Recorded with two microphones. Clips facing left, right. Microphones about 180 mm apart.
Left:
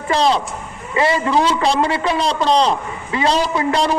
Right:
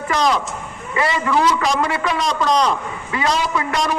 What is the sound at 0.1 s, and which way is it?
A man's voice, 30° left (ahead or behind).